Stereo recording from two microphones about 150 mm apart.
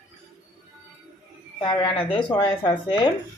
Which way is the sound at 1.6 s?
30° left (ahead or behind).